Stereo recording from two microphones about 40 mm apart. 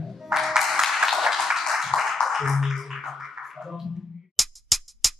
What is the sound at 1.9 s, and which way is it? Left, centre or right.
Music, centre.